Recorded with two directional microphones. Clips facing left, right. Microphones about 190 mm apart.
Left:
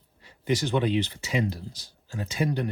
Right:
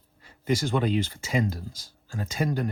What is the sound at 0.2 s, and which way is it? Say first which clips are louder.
Speech: even; 45° right (ahead or behind).